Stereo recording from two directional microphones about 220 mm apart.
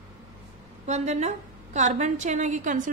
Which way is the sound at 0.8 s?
30° right (ahead or behind).